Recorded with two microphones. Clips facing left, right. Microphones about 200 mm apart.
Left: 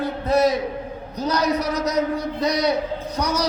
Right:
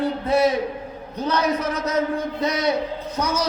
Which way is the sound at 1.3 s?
40° left (ahead or behind).